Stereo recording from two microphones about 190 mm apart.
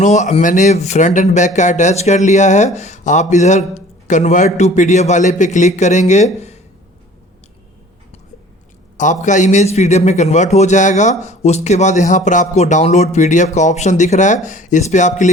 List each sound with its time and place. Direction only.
0.0 s speech: 40° left (ahead or behind)
9.0 s speech: 40° left (ahead or behind)